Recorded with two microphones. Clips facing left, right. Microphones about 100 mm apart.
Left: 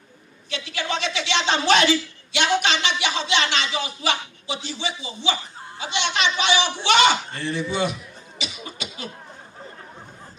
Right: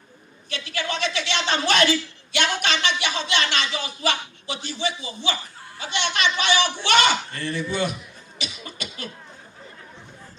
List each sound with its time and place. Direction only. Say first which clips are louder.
0.5 s a woman's voice: left 1 dB; 50° right (ahead or behind)
8.4 s beatboxing: left 1 dB; 50° right (ahead or behind)